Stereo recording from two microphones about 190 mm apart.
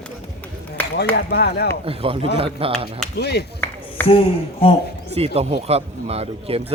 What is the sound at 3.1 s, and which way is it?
Speech, 60° left (ahead or behind).